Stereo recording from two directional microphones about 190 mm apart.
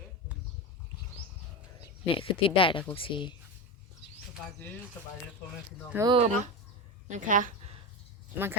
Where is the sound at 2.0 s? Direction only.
30° left (ahead or behind).